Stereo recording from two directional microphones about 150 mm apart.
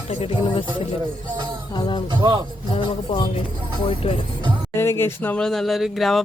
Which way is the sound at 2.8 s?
30° left (ahead or behind).